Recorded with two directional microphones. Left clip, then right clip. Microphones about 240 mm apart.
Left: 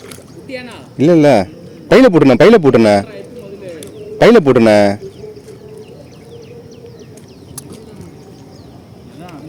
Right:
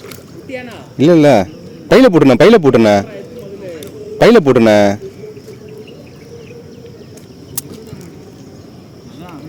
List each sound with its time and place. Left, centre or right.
0.4 s speech: centre
0.9 s a man's voice: centre